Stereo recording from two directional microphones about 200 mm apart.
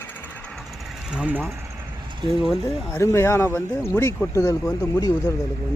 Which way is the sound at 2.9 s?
15° left (ahead or behind).